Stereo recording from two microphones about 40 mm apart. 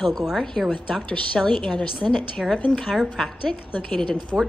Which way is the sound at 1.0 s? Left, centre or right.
Left.